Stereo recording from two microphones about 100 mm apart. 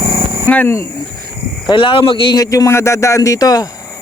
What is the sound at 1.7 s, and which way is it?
Speech, 60° left (ahead or behind).